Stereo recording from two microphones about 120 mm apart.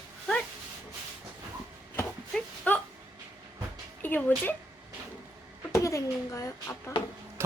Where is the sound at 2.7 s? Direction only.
10° left (ahead or behind).